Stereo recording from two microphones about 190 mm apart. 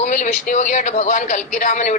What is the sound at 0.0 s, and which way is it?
Speech, 40° left (ahead or behind).